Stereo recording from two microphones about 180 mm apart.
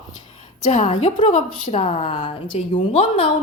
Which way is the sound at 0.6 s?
40° left (ahead or behind).